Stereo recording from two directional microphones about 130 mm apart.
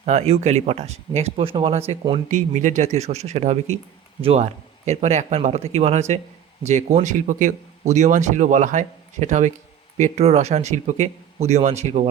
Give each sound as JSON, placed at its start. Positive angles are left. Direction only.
{"t": 0.0, "sound": "speech", "side_deg": -60}
{"t": 2.3, "sound": "speech", "side_deg": -70}
{"t": 4.2, "sound": "speech", "side_deg": -45}
{"t": 4.9, "sound": "speech", "side_deg": -60}
{"t": 10.0, "sound": "speech", "side_deg": -55}